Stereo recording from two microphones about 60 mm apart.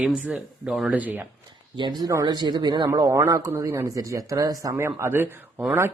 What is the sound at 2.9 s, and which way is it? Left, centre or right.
Speech, right.